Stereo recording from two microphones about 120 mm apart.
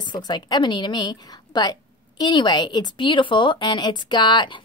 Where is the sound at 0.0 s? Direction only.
35° left (ahead or behind).